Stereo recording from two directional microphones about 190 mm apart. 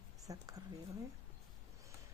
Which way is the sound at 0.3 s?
20° right (ahead or behind).